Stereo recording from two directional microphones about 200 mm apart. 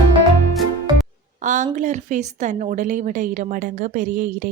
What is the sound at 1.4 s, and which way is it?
A woman's voice, 40° right (ahead or behind).